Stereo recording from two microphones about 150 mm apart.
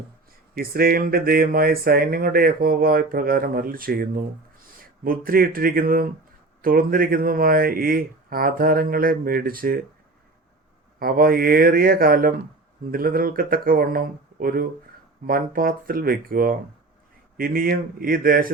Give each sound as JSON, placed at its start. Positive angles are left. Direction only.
{"t": 0.5, "sound": "speech", "side_deg": -80}
{"t": 11.0, "sound": "speech", "side_deg": -80}